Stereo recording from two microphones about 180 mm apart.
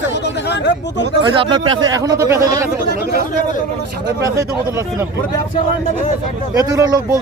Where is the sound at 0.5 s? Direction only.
75° left (ahead or behind).